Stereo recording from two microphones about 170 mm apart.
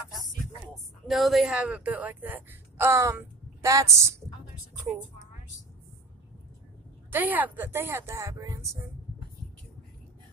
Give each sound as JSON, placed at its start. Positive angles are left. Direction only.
{"t": 1.0, "sound": "speech", "side_deg": 0}
{"t": 7.1, "sound": "speech", "side_deg": -10}